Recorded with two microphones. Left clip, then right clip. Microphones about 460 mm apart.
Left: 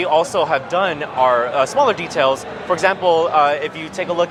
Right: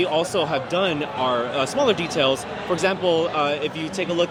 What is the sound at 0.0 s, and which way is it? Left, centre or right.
Speech, left.